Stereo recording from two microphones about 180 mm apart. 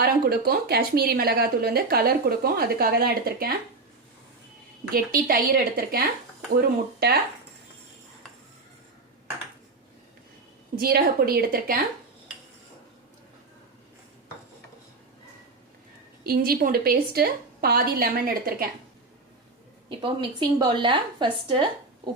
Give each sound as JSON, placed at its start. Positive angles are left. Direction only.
{"t": 0.0, "sound": "speech", "side_deg": -60}
{"t": 4.9, "sound": "a woman's voice", "side_deg": -55}
{"t": 10.8, "sound": "speech", "side_deg": -55}
{"t": 16.2, "sound": "speech", "side_deg": -55}
{"t": 19.9, "sound": "a woman's voice", "side_deg": -30}